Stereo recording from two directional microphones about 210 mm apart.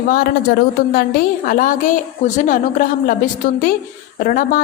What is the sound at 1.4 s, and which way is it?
A woman's voice, 40° left (ahead or behind).